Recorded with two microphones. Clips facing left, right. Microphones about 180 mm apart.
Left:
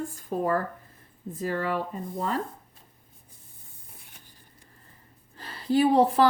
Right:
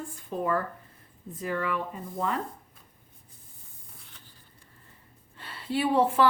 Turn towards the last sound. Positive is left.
turn(degrees=35)  # may be behind; listen again after turning